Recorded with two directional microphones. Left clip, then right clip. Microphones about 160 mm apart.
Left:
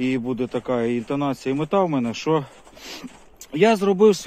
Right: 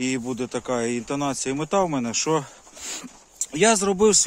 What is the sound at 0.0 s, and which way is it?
Speech, 45° right (ahead or behind).